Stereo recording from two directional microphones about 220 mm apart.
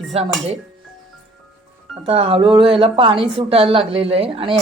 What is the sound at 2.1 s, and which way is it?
A woman's voice, 25° right (ahead or behind).